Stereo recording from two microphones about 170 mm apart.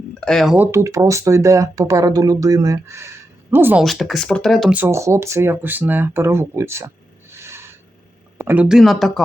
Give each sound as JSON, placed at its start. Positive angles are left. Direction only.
{"t": 0.2, "sound": "speech", "side_deg": 0}
{"t": 3.8, "sound": "speech", "side_deg": 0}
{"t": 4.7, "sound": "speech", "side_deg": -15}